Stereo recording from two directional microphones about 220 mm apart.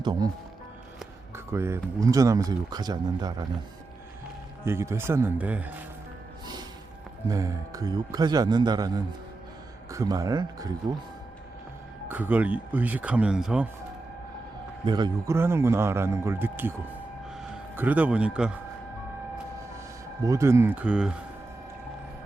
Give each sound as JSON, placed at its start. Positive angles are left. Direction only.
{"t": 0.0, "sound": "speech", "side_deg": -20}
{"t": 1.5, "sound": "speech", "side_deg": -10}
{"t": 4.6, "sound": "speech", "side_deg": -10}
{"t": 7.3, "sound": "speech", "side_deg": -15}
{"t": 12.0, "sound": "speech", "side_deg": -10}
{"t": 14.8, "sound": "speech", "side_deg": -20}
{"t": 20.2, "sound": "speech", "side_deg": -15}